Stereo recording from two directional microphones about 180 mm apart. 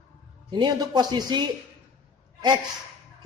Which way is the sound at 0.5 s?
25° right (ahead or behind).